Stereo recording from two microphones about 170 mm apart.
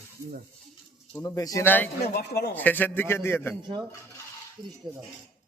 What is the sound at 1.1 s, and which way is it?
Speech, 20° left (ahead or behind).